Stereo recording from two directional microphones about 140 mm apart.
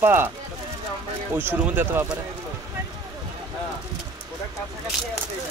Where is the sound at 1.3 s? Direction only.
15° right (ahead or behind).